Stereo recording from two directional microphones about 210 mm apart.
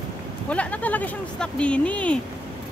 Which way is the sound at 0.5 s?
5° left (ahead or behind).